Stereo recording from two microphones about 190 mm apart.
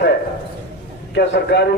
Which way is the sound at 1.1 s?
60° left (ahead or behind).